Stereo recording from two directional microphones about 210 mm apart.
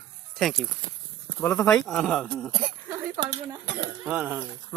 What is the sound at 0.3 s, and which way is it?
Speech, centre (ahead or behind).